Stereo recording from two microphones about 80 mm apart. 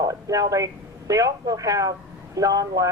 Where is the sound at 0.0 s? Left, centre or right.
Right.